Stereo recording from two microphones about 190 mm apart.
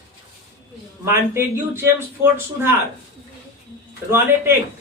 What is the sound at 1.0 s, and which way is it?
Speech, 10° right (ahead or behind).